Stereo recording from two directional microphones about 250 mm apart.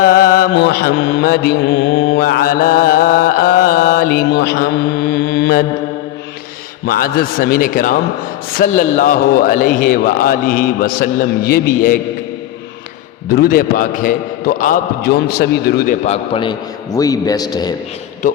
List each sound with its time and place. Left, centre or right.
0.0 s mantra: left
6.8 s a man's voice: left
13.2 s a man's voice: left
16.0 s a man's voice: left